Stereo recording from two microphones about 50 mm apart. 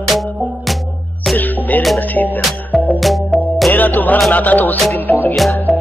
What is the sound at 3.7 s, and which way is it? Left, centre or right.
Music, left.